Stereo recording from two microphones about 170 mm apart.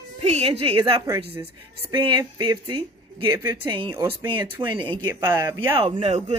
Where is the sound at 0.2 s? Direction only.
35° right (ahead or behind).